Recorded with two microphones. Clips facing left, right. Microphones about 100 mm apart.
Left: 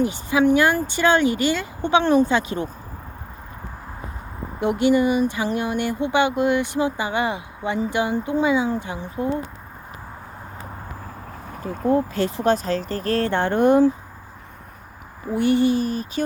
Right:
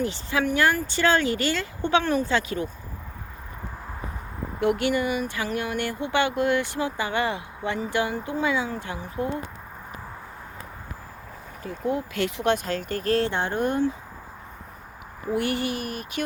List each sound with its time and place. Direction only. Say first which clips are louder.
0.0 s speech: left 7 dB; 15° left (ahead or behind)
4.6 s speech: left 5 dB; 20° left (ahead or behind)
11.6 s speech: left 7 dB; 45° left (ahead or behind)
13.3 s speech: left 8 dB; 55° left (ahead or behind); by 13.8 s 80° left
15.4 s speech: left 10 dB; 25° left (ahead or behind)